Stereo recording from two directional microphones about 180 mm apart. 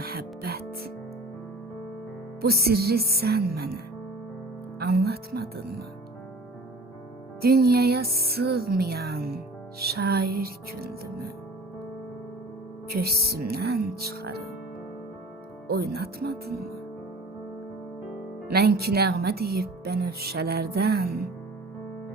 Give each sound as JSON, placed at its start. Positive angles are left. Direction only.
{"t": 0.0, "sound": "music", "side_deg": -60}
{"t": 2.4, "sound": "speech", "side_deg": -60}
{"t": 4.8, "sound": "speech", "side_deg": -60}
{"t": 7.4, "sound": "speech", "side_deg": -60}
{"t": 12.9, "sound": "speech", "side_deg": -60}
{"t": 15.6, "sound": "speech", "side_deg": -60}
{"t": 18.4, "sound": "speech", "side_deg": -60}